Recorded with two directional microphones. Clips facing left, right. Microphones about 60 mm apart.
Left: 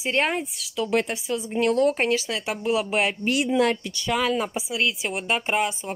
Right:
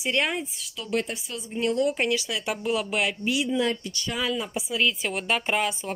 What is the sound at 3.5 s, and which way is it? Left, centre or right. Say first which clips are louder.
Speech: left 4 dB; left.